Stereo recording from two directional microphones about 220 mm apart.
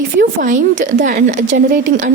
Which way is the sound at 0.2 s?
35° right (ahead or behind).